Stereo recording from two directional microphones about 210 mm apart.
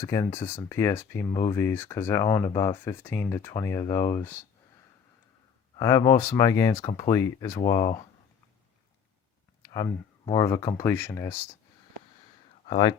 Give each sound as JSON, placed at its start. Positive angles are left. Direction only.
{"t": 0.0, "sound": "speech", "side_deg": 15}
{"t": 5.7, "sound": "speech", "side_deg": 15}
{"t": 9.7, "sound": "speech", "side_deg": 20}
{"t": 12.6, "sound": "speech", "side_deg": 25}